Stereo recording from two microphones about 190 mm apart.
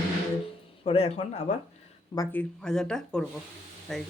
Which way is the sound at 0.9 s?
30° left (ahead or behind).